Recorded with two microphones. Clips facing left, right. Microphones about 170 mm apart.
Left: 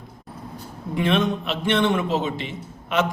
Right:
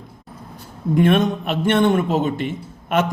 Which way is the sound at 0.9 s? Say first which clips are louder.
Right 5 dB; 50° right (ahead or behind).